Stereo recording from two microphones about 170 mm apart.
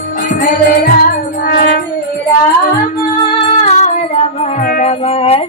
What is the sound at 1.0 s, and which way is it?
Music, 60° left (ahead or behind).